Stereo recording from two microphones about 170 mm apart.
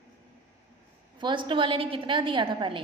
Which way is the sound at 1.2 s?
25° right (ahead or behind).